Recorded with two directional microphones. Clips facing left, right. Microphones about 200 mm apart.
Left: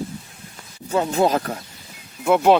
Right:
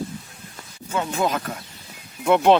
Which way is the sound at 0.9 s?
35° left (ahead or behind).